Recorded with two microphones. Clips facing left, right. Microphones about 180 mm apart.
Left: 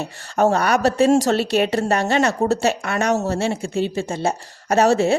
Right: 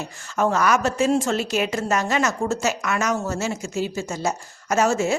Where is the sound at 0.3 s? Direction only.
35° left (ahead or behind).